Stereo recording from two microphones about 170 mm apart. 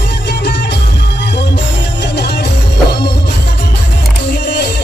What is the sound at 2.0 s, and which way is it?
Music, 80° left.